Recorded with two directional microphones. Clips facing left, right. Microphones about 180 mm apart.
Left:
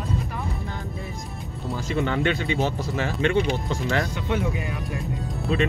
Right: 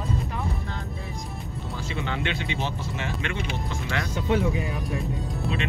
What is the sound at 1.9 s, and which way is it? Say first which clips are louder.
Speech: left 7 dB; 45° left (ahead or behind).